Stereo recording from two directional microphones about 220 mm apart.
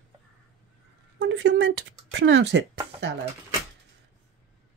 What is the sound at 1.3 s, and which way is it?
Speech, 55° right (ahead or behind).